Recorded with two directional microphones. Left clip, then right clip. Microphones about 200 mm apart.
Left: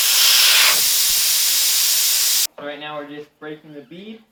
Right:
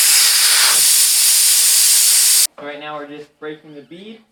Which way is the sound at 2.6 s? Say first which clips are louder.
Right 1 dB; 5° right (ahead or behind).